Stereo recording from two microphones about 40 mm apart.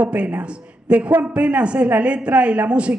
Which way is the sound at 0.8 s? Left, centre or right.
Right.